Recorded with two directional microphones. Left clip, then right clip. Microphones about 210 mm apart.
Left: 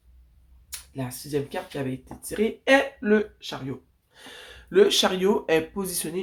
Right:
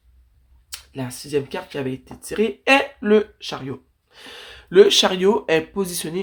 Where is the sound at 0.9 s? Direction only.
45° right (ahead or behind).